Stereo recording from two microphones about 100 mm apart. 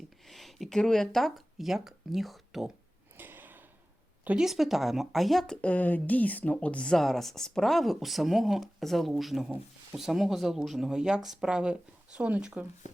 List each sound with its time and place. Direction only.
0.3 s speech: centre (ahead or behind)
3.2 s a sound: 20° right (ahead or behind)
4.4 s a woman's voice: centre (ahead or behind)
5.6 s a woman's voice: 15° left (ahead or behind); by 12.6 s 10° right (ahead or behind)